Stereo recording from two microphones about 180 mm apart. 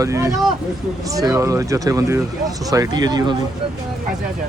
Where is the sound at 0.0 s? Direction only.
15° right (ahead or behind).